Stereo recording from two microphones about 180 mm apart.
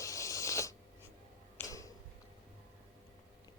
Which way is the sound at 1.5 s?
20° left (ahead or behind).